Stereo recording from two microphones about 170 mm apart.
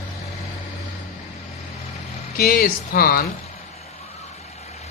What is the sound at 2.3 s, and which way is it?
Speech, 60° left (ahead or behind).